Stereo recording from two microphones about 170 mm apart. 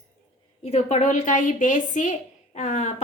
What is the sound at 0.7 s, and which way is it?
A woman's voice, 40° left (ahead or behind).